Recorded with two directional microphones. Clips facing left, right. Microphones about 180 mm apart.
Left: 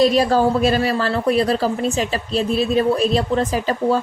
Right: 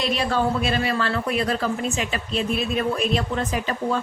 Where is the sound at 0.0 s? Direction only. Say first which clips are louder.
Left 8 dB; 40° left (ahead or behind).